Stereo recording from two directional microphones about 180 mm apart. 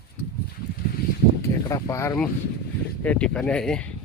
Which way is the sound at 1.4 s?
15° left (ahead or behind).